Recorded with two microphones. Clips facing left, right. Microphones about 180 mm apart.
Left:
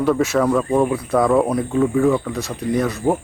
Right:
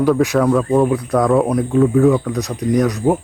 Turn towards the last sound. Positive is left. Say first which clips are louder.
# right 3 dB
turn(degrees=-15)  # may be behind; listen again after turning